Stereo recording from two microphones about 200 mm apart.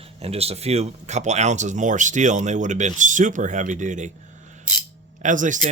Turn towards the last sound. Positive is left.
turn(degrees=-40)  # may be behind; listen again after turning